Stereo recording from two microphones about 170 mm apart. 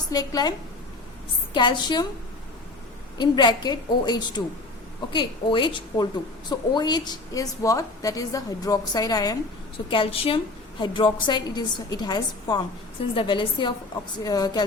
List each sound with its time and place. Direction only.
0.1 s a woman's voice: 20° left (ahead or behind)
1.5 s a woman's voice: 25° left (ahead or behind)
3.2 s a woman's voice: 25° left (ahead or behind)
9.9 s a woman's voice: 30° left (ahead or behind)